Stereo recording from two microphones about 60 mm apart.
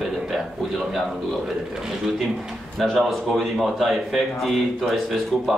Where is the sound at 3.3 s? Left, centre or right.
Centre.